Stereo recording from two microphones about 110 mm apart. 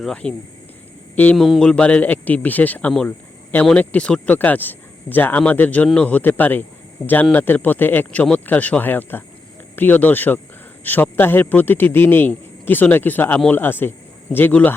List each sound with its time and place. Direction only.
0.0 s speech: 10° left (ahead or behind)
1.4 s speech: 5° left (ahead or behind)
3.1 s a sound: 15° left (ahead or behind)
3.7 s speech: 10° left (ahead or behind)